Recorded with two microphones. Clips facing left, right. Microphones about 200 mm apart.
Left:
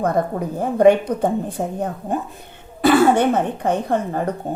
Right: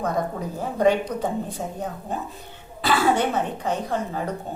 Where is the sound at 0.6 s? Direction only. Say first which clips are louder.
Left 7 dB; 55° left (ahead or behind).